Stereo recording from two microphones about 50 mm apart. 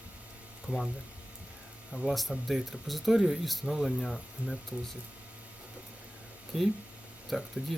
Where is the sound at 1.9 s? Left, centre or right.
Centre.